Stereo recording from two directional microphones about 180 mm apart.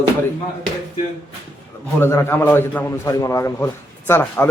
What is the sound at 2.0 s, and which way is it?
A man's voice, 15° left (ahead or behind).